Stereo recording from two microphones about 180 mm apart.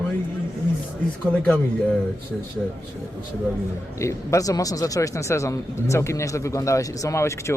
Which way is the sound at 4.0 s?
15° left (ahead or behind).